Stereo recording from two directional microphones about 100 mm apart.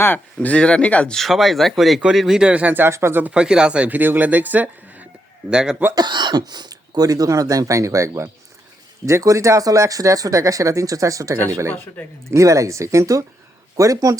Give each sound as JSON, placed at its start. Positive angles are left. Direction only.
{"t": 0.4, "sound": "speech", "side_deg": 10}
{"t": 5.9, "sound": "speech", "side_deg": -45}